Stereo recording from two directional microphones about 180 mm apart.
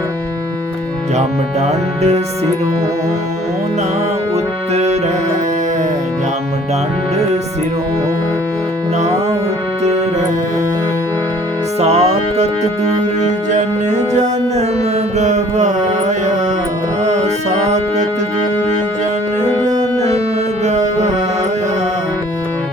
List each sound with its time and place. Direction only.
1.6 s music: 35° right (ahead or behind)
4.7 s music: 35° right (ahead or behind)
11.8 s music: 35° right (ahead or behind)
20.7 s music: 40° right (ahead or behind)